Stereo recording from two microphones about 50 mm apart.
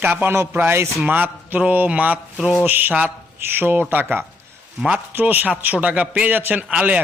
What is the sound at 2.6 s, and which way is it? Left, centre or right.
A man's voice, right.